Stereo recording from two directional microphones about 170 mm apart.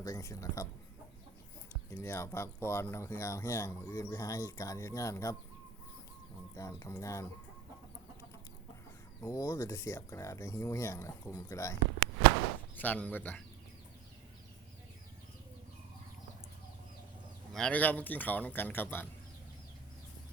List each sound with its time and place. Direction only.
0.0 s speech: 20° left (ahead or behind)
1.9 s speech: 15° left (ahead or behind)
6.6 s speech: 20° left (ahead or behind)
9.2 s speech: 20° left (ahead or behind)
12.7 s speech: 10° left (ahead or behind)
17.5 s speech: 5° left (ahead or behind)